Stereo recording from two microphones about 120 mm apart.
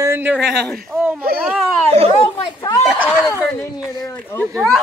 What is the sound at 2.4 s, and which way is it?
Speech, 30° left (ahead or behind).